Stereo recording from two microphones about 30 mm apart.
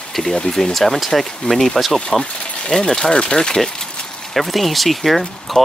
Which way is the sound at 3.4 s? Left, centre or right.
Centre.